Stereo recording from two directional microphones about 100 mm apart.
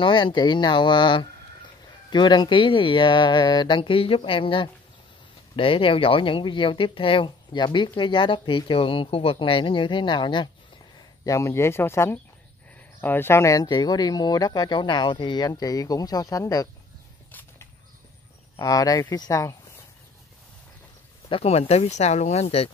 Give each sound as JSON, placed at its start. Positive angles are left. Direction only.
{"t": 0.0, "sound": "speech", "side_deg": 55}
{"t": 11.2, "sound": "speech", "side_deg": 30}
{"t": 13.7, "sound": "speech", "side_deg": 40}
{"t": 18.6, "sound": "speech", "side_deg": 40}
{"t": 21.3, "sound": "speech", "side_deg": 85}